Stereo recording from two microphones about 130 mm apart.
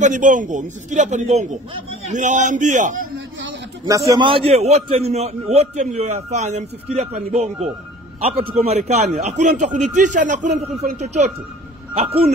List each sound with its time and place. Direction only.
0.0 s a man's voice: 75° right (ahead or behind)
3.8 s a man's voice: 25° right (ahead or behind)
4.2 s a man's voice: 45° right (ahead or behind); by 11.1 s 70° right (ahead or behind)
11.9 s speech: 50° right (ahead or behind)